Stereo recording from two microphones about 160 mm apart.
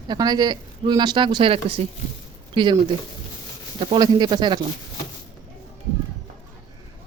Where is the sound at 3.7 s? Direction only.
30° right (ahead or behind).